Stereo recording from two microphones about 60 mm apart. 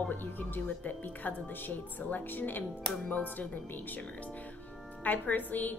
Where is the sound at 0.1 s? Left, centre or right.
Left.